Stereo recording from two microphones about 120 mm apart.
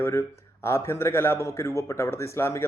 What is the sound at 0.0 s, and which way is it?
A man's voice, 25° left (ahead or behind).